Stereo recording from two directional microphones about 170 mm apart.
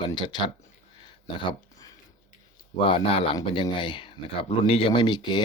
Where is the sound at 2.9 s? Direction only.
35° left (ahead or behind).